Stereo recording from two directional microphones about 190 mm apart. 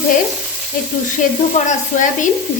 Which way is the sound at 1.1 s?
40° left (ahead or behind).